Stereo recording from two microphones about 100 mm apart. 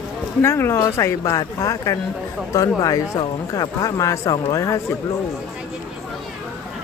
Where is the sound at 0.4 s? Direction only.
25° left (ahead or behind).